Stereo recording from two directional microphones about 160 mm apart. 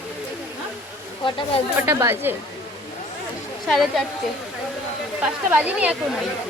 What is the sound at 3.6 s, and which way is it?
Speech, centre (ahead or behind).